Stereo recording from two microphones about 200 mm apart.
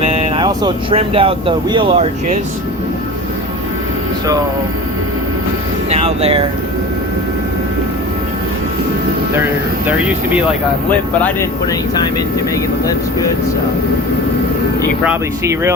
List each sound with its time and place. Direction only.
0.0 s speech: 30° right (ahead or behind)
5.9 s speech: 30° right (ahead or behind)
15.0 s speech: 10° right (ahead or behind)